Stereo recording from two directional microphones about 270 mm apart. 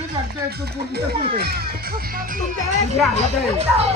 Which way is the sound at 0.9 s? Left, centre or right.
Right.